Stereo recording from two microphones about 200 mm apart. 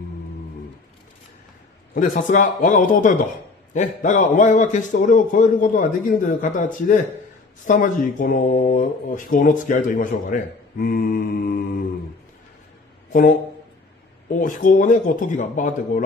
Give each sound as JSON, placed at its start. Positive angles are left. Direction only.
{"t": 2.0, "sound": "speech", "side_deg": 40}
{"t": 13.1, "sound": "speech", "side_deg": 40}
{"t": 14.4, "sound": "speech", "side_deg": 40}